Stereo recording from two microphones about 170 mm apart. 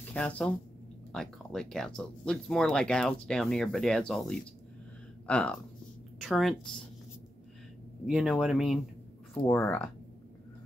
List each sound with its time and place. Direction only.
0.1 s speech: 5° left (ahead or behind)
8.1 s speech: 5° right (ahead or behind)
9.5 s speech: 15° left (ahead or behind)